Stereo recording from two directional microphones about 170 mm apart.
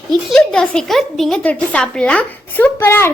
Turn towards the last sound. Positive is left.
turn(degrees=15)  # may be behind; listen again after turning